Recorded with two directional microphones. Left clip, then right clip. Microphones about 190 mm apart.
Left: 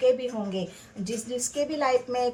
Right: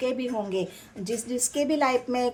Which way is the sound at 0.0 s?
45° right (ahead or behind).